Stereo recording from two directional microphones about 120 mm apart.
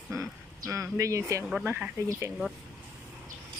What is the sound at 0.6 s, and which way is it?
Speech, 25° right (ahead or behind).